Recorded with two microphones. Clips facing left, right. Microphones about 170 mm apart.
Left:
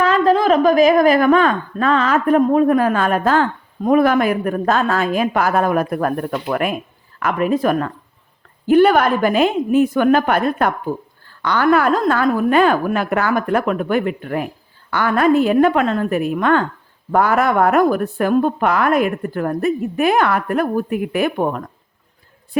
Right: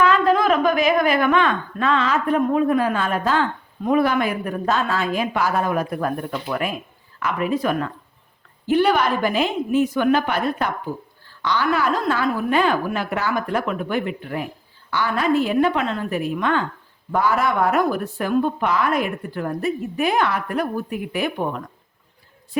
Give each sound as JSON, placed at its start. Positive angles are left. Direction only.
{"t": 0.0, "sound": "a woman's voice", "side_deg": 35}
{"t": 2.4, "sound": "a woman's voice", "side_deg": 40}
{"t": 2.6, "sound": "a woman's voice", "side_deg": 55}